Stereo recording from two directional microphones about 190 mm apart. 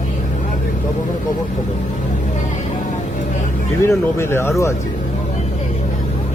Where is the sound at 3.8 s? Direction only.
15° left (ahead or behind).